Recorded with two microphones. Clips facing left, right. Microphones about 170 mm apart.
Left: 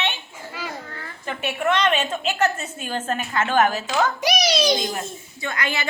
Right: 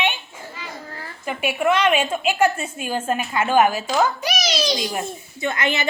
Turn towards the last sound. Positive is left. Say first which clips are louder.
# right 4 dB
turn(degrees=-20)  # may be behind; listen again after turning